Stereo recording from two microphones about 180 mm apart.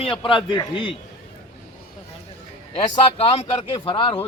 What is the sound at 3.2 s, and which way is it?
A man's voice, 30° left (ahead or behind).